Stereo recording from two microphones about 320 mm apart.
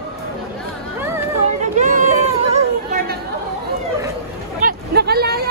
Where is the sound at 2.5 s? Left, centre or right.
Right.